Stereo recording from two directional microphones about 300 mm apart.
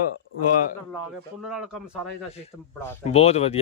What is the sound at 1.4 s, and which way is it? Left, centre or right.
Speech, centre.